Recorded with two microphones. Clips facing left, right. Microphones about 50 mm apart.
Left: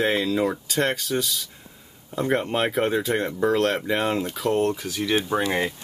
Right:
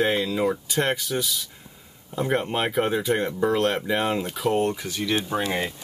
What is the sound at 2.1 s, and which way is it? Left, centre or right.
Speech, centre.